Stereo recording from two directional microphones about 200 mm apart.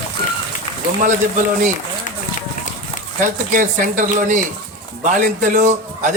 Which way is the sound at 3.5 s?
40° right (ahead or behind).